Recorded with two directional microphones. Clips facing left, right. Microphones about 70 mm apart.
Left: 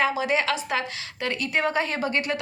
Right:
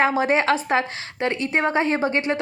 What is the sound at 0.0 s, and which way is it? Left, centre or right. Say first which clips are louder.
A woman's voice: right 4 dB; right.